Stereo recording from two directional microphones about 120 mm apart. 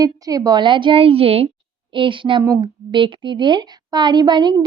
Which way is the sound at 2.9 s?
40° right (ahead or behind).